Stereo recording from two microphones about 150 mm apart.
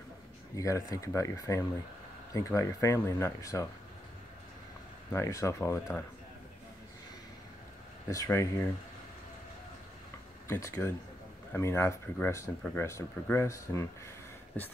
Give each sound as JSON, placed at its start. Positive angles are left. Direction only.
{"t": 0.6, "sound": "speech", "side_deg": 20}
{"t": 5.1, "sound": "speech", "side_deg": 20}
{"t": 8.1, "sound": "speech", "side_deg": 20}
{"t": 10.5, "sound": "speech", "side_deg": 15}